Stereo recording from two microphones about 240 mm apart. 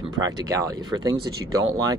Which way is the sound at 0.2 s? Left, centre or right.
Centre.